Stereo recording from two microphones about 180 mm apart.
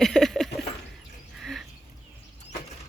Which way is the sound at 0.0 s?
Centre (ahead or behind).